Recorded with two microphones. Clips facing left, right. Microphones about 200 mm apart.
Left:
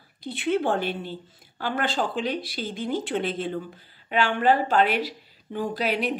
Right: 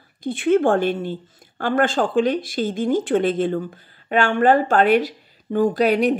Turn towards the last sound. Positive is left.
turn(degrees=-50)  # may be behind; listen again after turning